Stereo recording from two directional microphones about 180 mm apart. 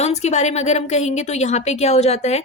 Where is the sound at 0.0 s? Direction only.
40° left (ahead or behind).